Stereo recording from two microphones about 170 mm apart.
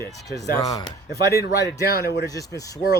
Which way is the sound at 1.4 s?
75° left (ahead or behind).